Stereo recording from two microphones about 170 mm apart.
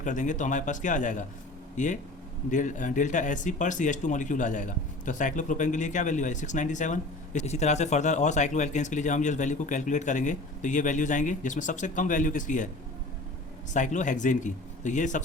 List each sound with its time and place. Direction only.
0.0 s speech: 45° left (ahead or behind)
13.7 s speech: 45° left (ahead or behind)